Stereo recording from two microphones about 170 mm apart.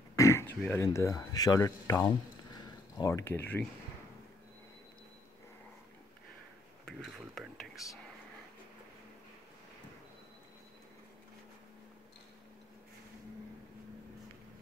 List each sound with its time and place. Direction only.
0.1 s speech: 15° left (ahead or behind)
6.9 s speech: centre (ahead or behind)